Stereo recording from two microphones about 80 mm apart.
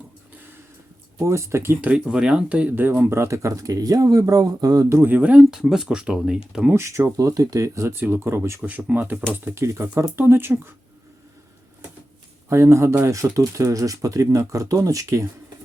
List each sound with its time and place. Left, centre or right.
1.2 s speech: right
1.8 s speech: centre; by 4.9 s right
4.9 s speech: right
5.1 s speech: centre
5.5 s speech: centre
6.7 s speech: right
8.6 s speech: centre
9.6 s speech: right
12.5 s speech: right